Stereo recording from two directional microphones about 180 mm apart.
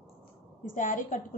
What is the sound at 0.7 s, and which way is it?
Speech, 45° left (ahead or behind).